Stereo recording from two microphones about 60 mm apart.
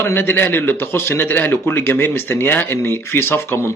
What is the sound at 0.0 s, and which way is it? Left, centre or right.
A man's voice, left.